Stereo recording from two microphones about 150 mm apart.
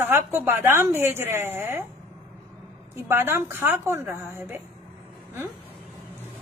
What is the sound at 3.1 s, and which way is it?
A woman's voice, 15° right (ahead or behind).